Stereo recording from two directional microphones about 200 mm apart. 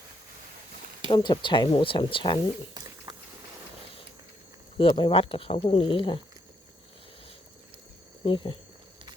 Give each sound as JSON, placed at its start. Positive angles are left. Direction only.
{"t": 1.1, "sound": "speech", "side_deg": 25}
{"t": 4.8, "sound": "speech", "side_deg": 25}
{"t": 8.2, "sound": "speech", "side_deg": 25}